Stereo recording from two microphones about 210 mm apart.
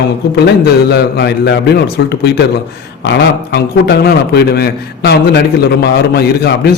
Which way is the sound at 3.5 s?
50° left (ahead or behind).